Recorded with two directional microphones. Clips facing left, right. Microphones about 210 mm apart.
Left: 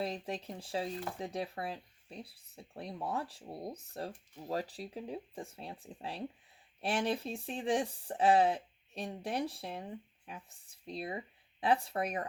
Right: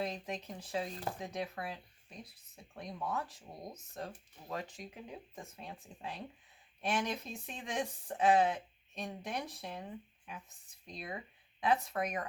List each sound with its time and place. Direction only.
0.0 s speech: 30° left (ahead or behind)